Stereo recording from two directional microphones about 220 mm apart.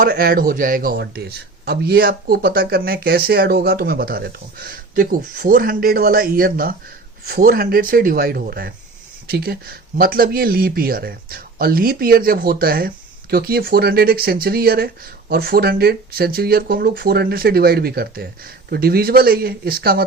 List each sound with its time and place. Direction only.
0.0 s a man's voice: 40° right (ahead or behind)